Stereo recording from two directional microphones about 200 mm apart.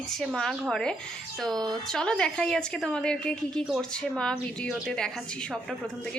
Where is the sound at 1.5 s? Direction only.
20° right (ahead or behind).